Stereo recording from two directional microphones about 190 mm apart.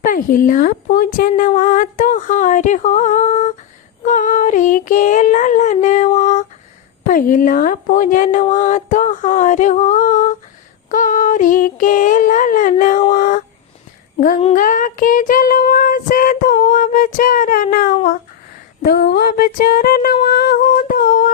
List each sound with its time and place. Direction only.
0.0 s speech: 45° left (ahead or behind)
14.4 s child singing: 45° left (ahead or behind)
18.8 s a sound: 50° left (ahead or behind)